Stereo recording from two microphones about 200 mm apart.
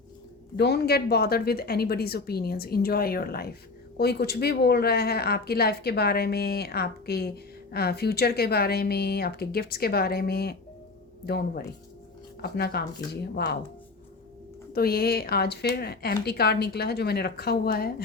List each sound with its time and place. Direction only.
0.5 s speech: 55° left (ahead or behind)
14.7 s speech: 50° left (ahead or behind)